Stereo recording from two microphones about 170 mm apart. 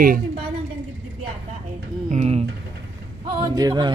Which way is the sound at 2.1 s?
40° right (ahead or behind).